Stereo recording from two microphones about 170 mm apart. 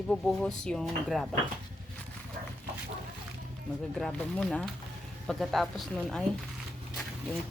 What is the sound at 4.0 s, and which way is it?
Speech, 5° left (ahead or behind).